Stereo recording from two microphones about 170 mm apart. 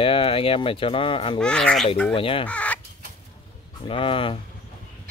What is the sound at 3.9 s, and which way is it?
Speech, 30° left (ahead or behind).